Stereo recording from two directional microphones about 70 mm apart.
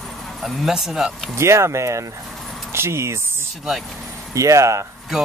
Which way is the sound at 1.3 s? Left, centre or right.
Right.